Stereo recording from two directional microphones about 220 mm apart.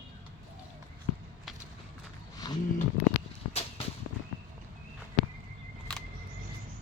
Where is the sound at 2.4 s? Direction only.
20° left (ahead or behind).